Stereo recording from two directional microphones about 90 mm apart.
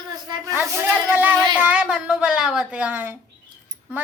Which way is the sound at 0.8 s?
20° right (ahead or behind).